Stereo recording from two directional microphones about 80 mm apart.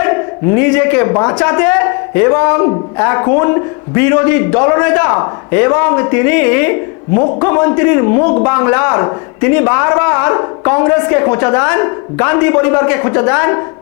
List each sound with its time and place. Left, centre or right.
0.0 s a man's voice: left
7.2 s a man's voice: left
7.4 s a man's voice: left